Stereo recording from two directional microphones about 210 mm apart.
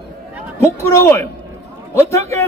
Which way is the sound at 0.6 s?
15° left (ahead or behind).